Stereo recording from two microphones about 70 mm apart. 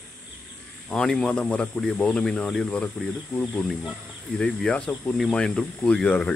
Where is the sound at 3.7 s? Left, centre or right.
Centre.